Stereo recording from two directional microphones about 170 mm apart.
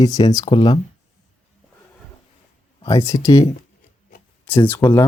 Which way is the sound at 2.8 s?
20° left (ahead or behind).